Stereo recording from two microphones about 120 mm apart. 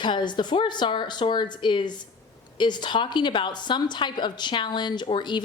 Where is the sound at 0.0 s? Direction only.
40° left (ahead or behind).